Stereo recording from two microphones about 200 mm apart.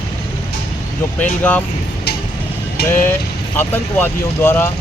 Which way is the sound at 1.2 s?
10° left (ahead or behind).